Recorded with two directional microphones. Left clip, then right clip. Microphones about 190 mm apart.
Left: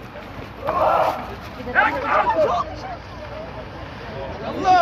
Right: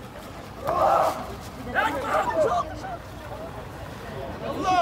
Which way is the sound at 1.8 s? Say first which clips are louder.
Left 6 dB; 90° right.